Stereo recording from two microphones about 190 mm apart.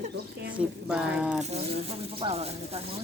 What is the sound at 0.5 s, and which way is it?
Speech, 5° right (ahead or behind).